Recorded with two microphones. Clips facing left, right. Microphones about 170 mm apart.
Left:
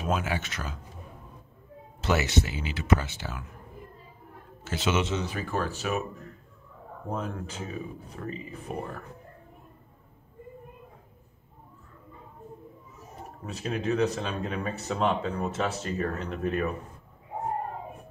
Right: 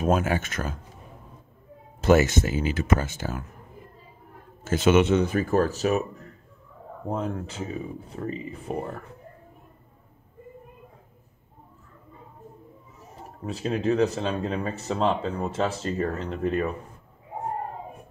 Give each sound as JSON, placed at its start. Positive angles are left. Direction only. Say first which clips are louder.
{"t": 0.0, "sound": "speech", "louder": "right 6 dB", "side_deg": -45}
{"t": 2.0, "sound": "speech", "louder": "right 7 dB", "side_deg": -45}
{"t": 4.6, "sound": "speech", "louder": "right 8 dB", "side_deg": -50}
{"t": 13.5, "sound": "speech", "louder": "right 4 dB", "side_deg": -30}